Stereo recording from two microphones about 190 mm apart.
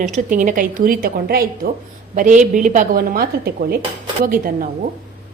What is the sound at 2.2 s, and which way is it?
A woman's voice, 40° right (ahead or behind).